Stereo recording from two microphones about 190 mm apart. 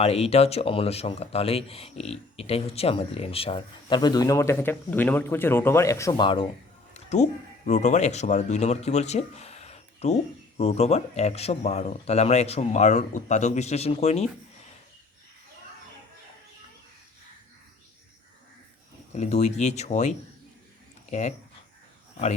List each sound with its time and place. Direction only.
0.0 s speech: 30° left (ahead or behind)
6.9 s a sound: 35° left (ahead or behind)
7.7 s speech: 35° left (ahead or behind)
19.1 s speech: 35° left (ahead or behind)